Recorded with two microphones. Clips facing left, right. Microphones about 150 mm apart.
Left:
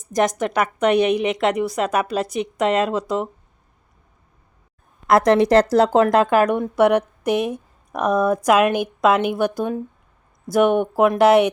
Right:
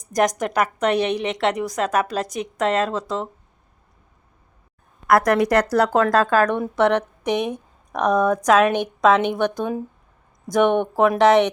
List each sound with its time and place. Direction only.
0.2 s a woman's voice: centre (ahead or behind)
5.0 s a woman's voice: 25° left (ahead or behind); by 11.5 s 10° left (ahead or behind)